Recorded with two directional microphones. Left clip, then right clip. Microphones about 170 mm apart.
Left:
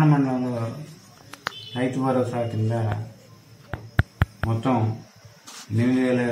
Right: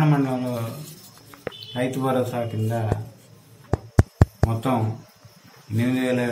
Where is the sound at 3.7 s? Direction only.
35° right (ahead or behind).